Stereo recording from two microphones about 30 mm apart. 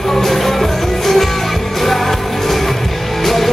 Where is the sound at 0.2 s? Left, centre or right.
Centre.